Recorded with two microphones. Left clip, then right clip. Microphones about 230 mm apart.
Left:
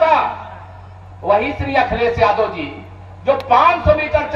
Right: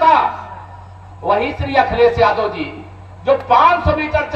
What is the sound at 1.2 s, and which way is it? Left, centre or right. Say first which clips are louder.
Speech: left 1 dB; right.